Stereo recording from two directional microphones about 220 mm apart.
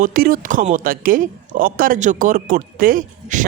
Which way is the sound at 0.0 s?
40° right (ahead or behind).